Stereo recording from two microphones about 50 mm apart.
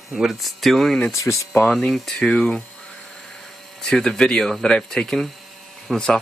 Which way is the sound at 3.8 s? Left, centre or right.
Centre.